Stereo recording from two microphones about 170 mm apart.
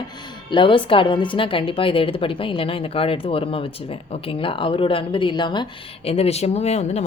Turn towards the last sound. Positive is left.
turn(degrees=40)  # may be behind; listen again after turning